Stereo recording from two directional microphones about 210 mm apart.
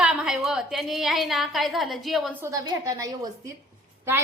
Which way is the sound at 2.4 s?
15° right (ahead or behind).